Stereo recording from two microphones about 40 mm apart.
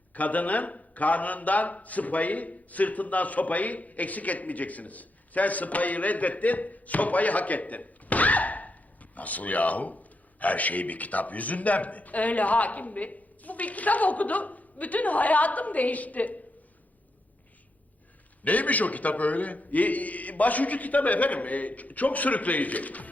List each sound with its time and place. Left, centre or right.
0.1 s a man's voice: left
18.4 s a man's voice: left